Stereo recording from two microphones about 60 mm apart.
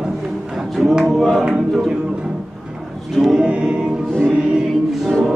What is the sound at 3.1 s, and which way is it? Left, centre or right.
Music, centre.